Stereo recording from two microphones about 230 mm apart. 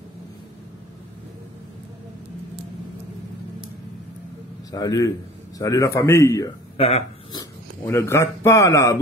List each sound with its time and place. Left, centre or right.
4.6 s speech: centre
6.8 s speech: left
7.8 s speech: centre